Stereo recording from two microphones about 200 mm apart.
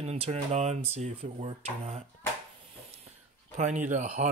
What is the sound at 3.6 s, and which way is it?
Speech, 35° right (ahead or behind).